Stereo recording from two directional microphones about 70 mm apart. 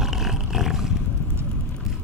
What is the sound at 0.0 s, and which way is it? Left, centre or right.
Roar, centre.